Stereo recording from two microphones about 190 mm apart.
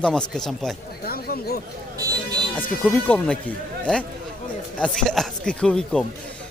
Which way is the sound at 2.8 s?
10° left (ahead or behind).